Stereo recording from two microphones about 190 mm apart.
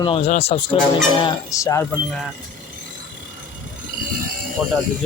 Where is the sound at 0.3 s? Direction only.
35° left (ahead or behind).